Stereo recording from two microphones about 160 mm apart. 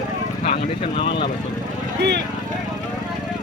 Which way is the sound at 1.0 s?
35° left (ahead or behind).